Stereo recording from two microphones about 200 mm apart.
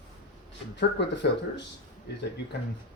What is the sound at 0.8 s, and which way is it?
Speech, 60° left (ahead or behind).